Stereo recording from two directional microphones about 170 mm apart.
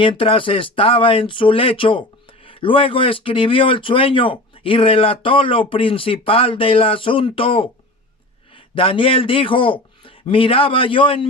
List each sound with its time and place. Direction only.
0.0 s speech: 30° left (ahead or behind)